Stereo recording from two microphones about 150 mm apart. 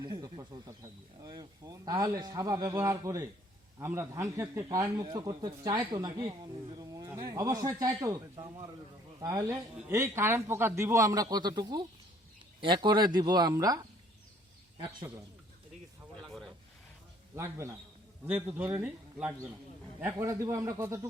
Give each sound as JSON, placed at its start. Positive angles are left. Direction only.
{"t": 0.0, "sound": "a man's voice", "side_deg": -30}
{"t": 17.3, "sound": "a man's voice", "side_deg": -20}